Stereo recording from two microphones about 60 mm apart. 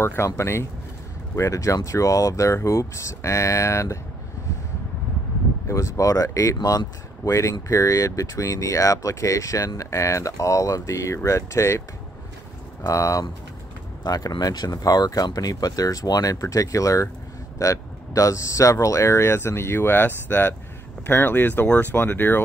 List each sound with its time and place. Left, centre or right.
0.0 s speech: left
5.7 s speech: left
7.2 s speech: left
12.8 s speech: left
14.1 s speech: left